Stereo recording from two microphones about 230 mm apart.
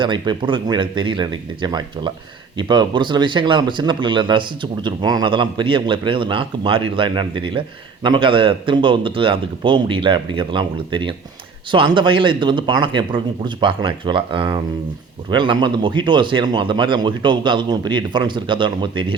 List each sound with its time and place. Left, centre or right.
0.0 s speech: right